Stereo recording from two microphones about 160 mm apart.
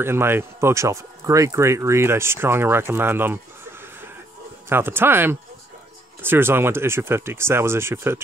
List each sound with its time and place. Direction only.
0.0 s speech: 15° right (ahead or behind)
4.6 s speech: 15° right (ahead or behind)